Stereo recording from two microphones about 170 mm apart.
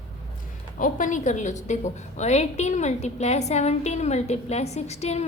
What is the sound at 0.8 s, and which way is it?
A woman's voice, 50° left (ahead or behind).